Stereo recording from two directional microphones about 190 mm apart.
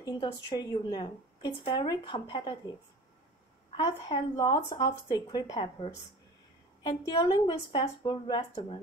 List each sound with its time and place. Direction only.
0.0 s speech: 25° left (ahead or behind)
3.7 s speech: 25° left (ahead or behind)